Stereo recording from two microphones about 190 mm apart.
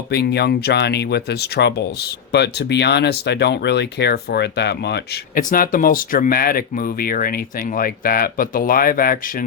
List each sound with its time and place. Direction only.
0.1 s speech: 60° left (ahead or behind)